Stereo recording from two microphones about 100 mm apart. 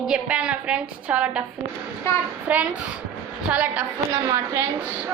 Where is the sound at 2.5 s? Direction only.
15° right (ahead or behind).